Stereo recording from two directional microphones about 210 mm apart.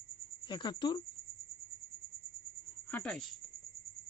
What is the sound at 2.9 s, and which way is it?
Speech, 5° left (ahead or behind).